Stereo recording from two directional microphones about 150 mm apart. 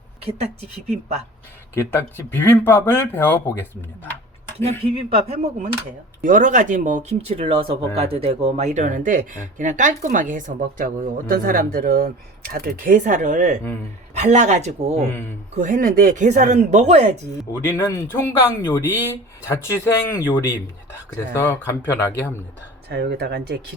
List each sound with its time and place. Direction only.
1.7 s speech: 15° left (ahead or behind)
4.8 s speech: 40° right (ahead or behind)
5.4 s speech: 70° right (ahead or behind); by 15.0 s 50° right (ahead or behind)
15.5 s speech: 60° right (ahead or behind)
17.6 s speech: 15° left (ahead or behind)
22.9 s speech: 90° right